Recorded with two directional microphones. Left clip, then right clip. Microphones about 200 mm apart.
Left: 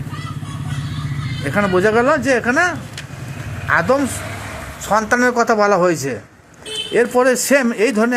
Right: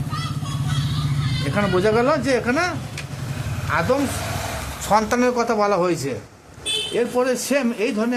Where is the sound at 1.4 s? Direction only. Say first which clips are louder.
Left 4 dB; 15° left (ahead or behind).